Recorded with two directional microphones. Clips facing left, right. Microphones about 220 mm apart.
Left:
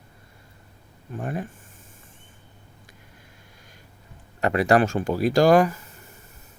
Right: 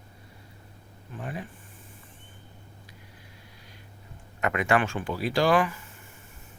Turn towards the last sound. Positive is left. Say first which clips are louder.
# left 6 dB
turn(degrees=40)  # may be behind; listen again after turning